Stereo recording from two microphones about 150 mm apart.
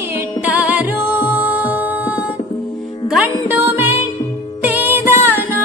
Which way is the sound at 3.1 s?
10° right (ahead or behind).